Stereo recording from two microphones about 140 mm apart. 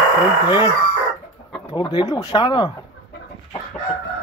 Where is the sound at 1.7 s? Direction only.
30° left (ahead or behind).